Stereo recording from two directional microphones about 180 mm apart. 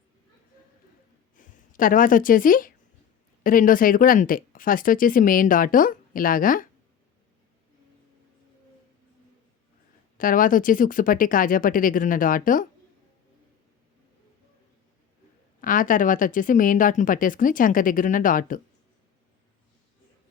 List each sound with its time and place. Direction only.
1.4 s speech: 45° left (ahead or behind)
10.2 s speech: 50° left (ahead or behind)
15.6 s speech: 50° left (ahead or behind)